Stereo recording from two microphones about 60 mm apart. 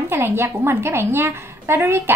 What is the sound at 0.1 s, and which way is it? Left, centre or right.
A woman's voice, right.